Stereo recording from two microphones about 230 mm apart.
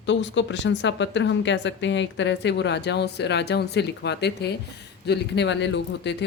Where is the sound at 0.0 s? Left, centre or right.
Left.